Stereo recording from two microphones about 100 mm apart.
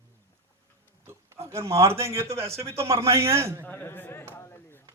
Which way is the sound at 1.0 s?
25° right (ahead or behind).